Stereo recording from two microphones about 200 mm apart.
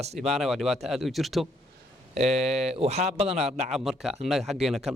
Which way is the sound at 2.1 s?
35° right (ahead or behind).